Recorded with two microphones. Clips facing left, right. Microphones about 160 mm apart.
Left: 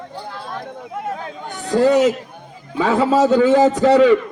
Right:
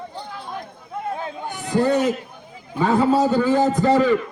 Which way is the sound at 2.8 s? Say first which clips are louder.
Left 2 dB; 90° left.